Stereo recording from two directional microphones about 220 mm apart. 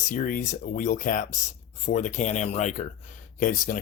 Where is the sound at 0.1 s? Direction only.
40° left (ahead or behind).